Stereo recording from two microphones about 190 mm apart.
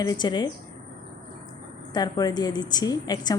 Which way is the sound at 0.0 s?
20° left (ahead or behind).